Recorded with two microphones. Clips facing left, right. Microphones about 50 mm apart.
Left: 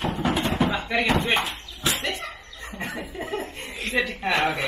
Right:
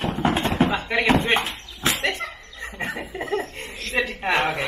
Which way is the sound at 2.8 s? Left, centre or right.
Right.